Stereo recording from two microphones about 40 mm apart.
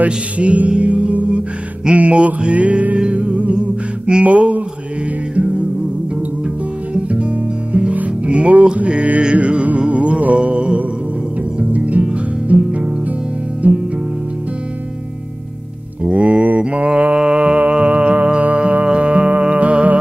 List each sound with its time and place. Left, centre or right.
0.0 s music: right
16.1 s music: right
16.6 s mantra: right
17.6 s music: right